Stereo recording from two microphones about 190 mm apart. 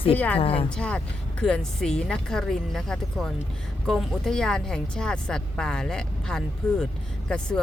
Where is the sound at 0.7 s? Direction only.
5° left (ahead or behind).